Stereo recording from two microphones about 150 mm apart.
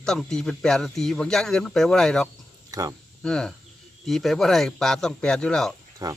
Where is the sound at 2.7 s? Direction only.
25° right (ahead or behind).